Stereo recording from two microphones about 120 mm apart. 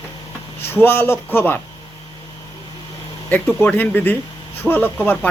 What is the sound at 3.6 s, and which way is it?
Speech, 15° left (ahead or behind).